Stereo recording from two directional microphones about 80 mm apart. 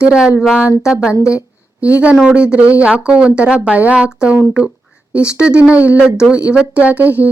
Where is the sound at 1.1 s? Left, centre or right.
Left.